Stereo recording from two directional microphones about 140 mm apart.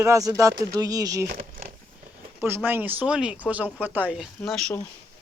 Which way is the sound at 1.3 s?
85° right.